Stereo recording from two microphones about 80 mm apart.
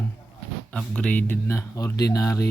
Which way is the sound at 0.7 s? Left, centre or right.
Centre.